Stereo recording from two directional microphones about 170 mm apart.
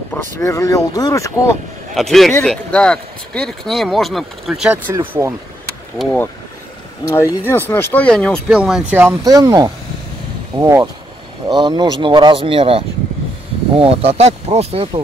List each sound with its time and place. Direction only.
0.1 s speech: 15° left (ahead or behind)
2.0 s speech: centre (ahead or behind)
4.9 s speech: 15° right (ahead or behind)
7.1 s speech: 15° left (ahead or behind); by 14.9 s 35° right (ahead or behind)